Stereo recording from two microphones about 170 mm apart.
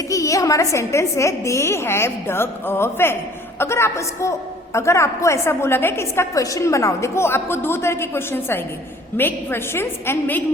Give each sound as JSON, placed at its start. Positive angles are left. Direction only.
{"t": 0.1, "sound": "a woman's voice", "side_deg": 20}